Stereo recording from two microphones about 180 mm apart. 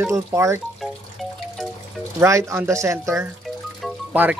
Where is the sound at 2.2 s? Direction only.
15° right (ahead or behind).